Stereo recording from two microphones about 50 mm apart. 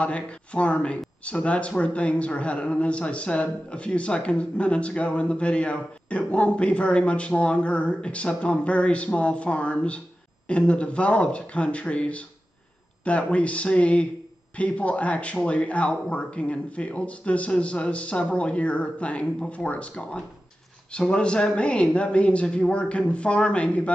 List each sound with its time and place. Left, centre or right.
0.0 s speech: left